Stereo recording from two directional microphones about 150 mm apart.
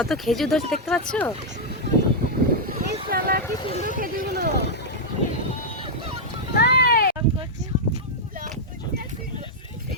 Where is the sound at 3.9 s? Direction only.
75° right (ahead or behind).